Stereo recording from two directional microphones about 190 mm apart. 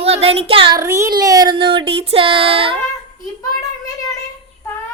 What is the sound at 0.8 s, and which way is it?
Child singing, 15° right (ahead or behind).